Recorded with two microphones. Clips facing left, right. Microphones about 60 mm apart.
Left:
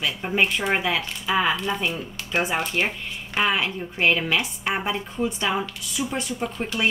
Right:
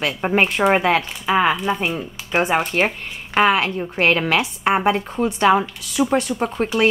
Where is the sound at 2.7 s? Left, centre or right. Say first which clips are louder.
Right 5 dB; right.